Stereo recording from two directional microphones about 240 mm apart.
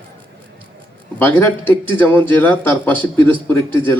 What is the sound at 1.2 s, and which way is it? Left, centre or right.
A man's voice, centre.